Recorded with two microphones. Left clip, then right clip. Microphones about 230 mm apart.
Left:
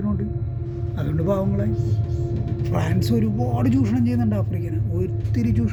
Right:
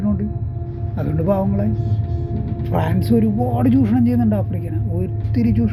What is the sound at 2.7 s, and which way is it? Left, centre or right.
Speech, centre.